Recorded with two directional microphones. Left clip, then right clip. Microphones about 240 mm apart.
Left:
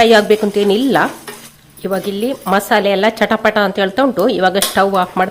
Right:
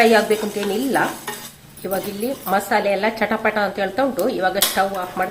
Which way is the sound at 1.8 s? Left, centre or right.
Left.